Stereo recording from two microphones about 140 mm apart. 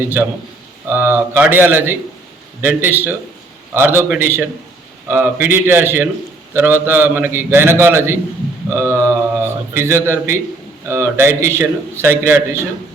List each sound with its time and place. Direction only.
0.0 s a man's voice: 15° right (ahead or behind)